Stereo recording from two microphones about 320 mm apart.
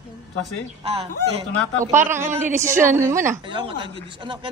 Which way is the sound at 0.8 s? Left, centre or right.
Centre.